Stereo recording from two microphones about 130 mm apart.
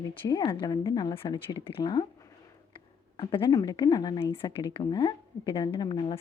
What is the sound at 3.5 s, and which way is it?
Speech, 30° left (ahead or behind).